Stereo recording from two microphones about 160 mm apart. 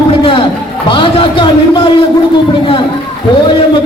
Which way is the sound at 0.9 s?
30° left (ahead or behind).